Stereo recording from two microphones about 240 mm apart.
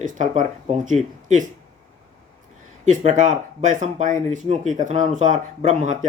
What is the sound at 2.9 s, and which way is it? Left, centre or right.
Speech, right.